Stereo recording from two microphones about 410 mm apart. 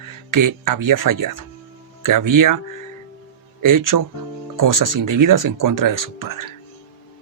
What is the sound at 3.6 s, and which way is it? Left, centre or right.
Speech, right.